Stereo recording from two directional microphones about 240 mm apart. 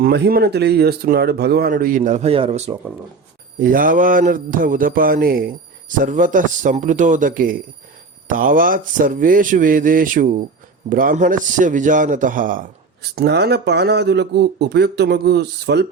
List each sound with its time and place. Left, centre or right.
0.0 s speech: right
3.6 s a man's voice: right